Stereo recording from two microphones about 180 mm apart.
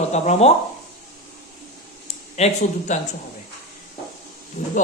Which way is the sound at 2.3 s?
40° left (ahead or behind).